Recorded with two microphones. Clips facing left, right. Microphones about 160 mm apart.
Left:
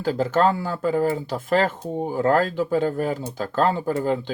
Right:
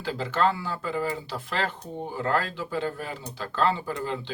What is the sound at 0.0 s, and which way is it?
Speech, 45° left (ahead or behind).